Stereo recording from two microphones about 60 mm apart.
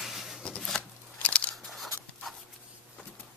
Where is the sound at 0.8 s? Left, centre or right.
Left.